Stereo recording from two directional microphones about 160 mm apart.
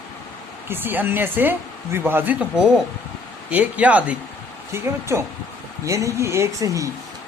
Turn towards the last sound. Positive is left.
turn(degrees=-20)  # may be behind; listen again after turning